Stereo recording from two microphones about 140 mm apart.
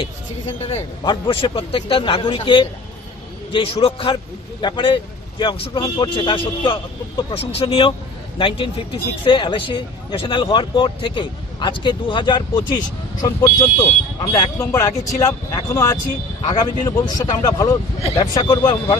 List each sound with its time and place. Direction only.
1.0 s speech: 35° left (ahead or behind)